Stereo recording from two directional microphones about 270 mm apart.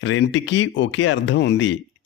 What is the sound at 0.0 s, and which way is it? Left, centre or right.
Speech, left.